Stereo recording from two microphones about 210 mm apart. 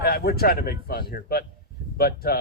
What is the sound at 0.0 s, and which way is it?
Speech, 45° left (ahead or behind).